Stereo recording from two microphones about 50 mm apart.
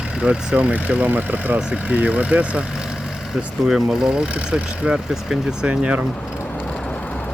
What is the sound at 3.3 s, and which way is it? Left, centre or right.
Speech, centre.